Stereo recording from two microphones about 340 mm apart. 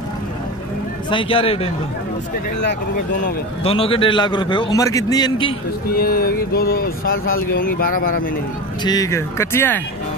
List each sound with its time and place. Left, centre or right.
1.1 s a man's voice: centre
3.3 s a man's voice: centre
5.9 s speech: left
8.8 s a man's voice: centre